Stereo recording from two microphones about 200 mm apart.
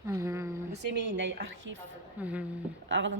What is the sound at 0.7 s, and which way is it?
A woman's voice, 60° right (ahead or behind).